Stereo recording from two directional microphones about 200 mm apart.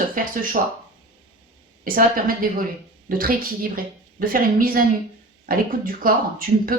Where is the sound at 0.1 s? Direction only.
45° right (ahead or behind).